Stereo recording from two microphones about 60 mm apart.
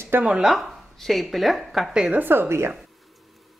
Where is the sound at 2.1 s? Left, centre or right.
Right.